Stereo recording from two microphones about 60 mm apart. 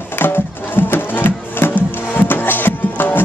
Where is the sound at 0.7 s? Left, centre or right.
Left.